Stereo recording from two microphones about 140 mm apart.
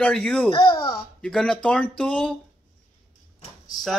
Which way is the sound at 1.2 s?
5° left (ahead or behind).